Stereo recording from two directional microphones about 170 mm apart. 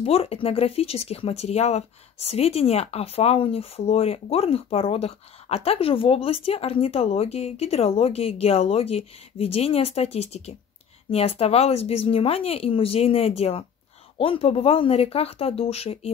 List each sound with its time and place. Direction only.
0.0 s speech: 35° left (ahead or behind)